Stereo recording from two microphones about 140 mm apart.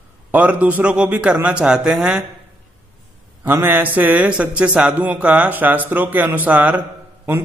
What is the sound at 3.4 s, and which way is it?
Mantra, 15° right (ahead or behind).